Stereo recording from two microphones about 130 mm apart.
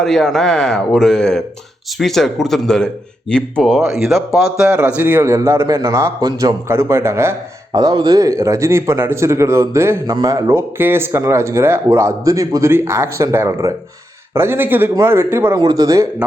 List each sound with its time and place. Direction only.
0.0 s speech: 5° left (ahead or behind); by 7.3 s 20° right (ahead or behind)
7.7 s speech: 35° right (ahead or behind); by 15.5 s 15° right (ahead or behind)
15.5 s speech: 30° right (ahead or behind)